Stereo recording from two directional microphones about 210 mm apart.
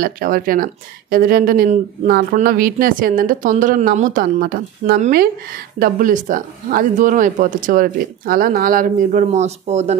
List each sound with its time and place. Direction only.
0.0 s speech: 45° right (ahead or behind)